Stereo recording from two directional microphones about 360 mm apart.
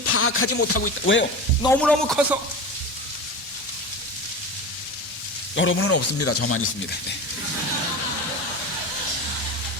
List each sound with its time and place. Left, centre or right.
0.0 s speech: left
1.6 s speech: centre
5.5 s speech: left